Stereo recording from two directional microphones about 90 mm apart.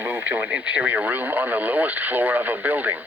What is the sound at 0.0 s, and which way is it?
Speech, 20° right (ahead or behind).